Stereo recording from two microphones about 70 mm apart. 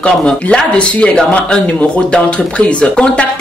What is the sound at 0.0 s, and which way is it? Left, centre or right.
Speech, centre.